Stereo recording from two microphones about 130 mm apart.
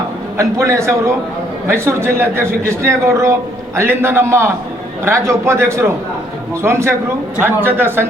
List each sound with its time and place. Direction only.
0.3 s a man's voice: 25° right (ahead or behind)